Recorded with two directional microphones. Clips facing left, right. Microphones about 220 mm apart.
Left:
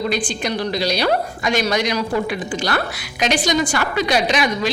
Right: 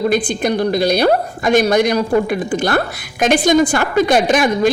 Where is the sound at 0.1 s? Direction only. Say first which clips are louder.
Right 6 dB; 55° right (ahead or behind).